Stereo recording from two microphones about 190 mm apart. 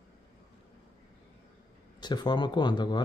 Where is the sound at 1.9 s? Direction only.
20° left (ahead or behind).